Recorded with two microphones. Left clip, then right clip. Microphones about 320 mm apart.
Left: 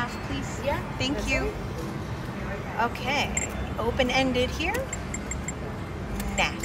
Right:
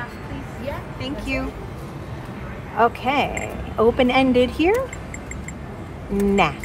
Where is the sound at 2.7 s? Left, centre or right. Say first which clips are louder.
Right 8 dB; centre.